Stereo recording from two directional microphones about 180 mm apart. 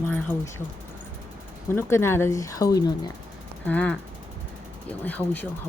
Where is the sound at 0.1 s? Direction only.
10° left (ahead or behind).